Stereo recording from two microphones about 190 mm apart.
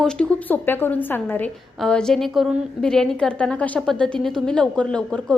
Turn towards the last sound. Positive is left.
turn(degrees=5)  # may be behind; listen again after turning